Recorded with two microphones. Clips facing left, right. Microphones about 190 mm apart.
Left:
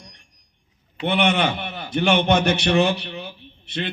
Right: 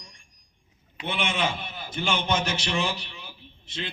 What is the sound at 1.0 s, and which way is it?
A man's voice, 65° left (ahead or behind).